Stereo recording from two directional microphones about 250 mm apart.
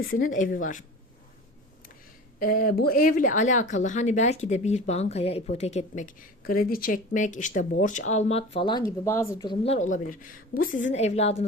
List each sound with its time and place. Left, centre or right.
0.0 s speech: left
2.4 s speech: left